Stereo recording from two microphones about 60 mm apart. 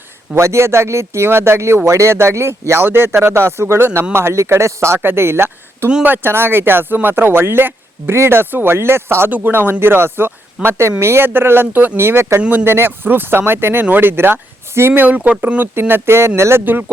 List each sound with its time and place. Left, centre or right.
0.3 s speech: right
12.4 s speech: right
12.7 s speech: right